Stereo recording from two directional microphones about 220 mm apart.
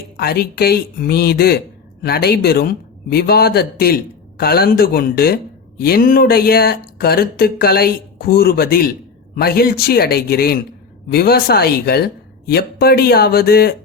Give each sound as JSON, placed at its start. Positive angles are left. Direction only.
{"t": 0.2, "sound": "speech", "side_deg": 45}